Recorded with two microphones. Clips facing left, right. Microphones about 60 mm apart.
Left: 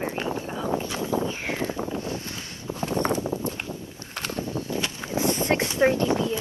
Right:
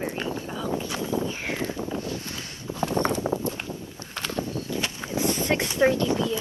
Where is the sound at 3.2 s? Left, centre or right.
Right.